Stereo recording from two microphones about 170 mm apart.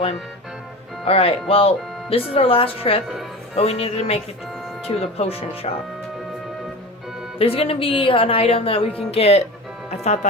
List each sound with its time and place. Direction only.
1.0 s speech: 35° left (ahead or behind)
7.3 s speech: 35° left (ahead or behind)